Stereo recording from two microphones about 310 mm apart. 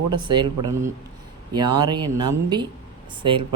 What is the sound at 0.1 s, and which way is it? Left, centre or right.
Speech, centre.